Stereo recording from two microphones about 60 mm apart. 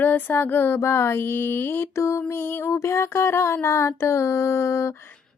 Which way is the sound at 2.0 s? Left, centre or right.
Left.